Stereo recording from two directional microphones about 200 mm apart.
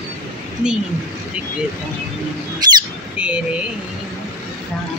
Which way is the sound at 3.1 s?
5° right (ahead or behind).